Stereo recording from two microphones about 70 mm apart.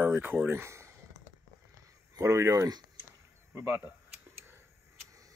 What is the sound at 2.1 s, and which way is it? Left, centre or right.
Speech, right.